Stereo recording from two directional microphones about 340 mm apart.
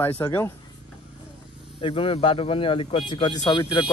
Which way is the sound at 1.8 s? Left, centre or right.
Centre.